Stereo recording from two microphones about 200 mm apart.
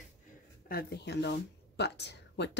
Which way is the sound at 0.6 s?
50° left (ahead or behind).